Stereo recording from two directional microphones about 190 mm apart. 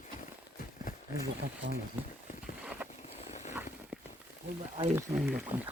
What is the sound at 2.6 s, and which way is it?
Boat, 5° right (ahead or behind).